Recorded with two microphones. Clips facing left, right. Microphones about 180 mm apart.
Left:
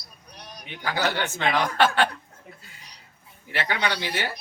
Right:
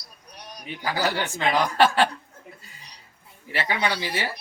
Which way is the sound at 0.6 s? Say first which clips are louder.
Right 1 dB; 10° right (ahead or behind).